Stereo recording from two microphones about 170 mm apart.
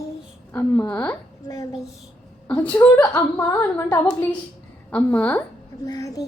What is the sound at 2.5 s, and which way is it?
A woman's voice, 10° left (ahead or behind).